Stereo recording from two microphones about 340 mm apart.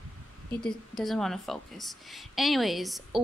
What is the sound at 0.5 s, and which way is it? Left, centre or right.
Speech, centre.